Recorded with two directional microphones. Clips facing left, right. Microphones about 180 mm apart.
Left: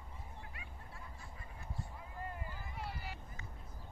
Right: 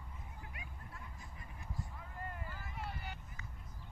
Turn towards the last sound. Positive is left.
turn(degrees=0)  # may be behind; listen again after turning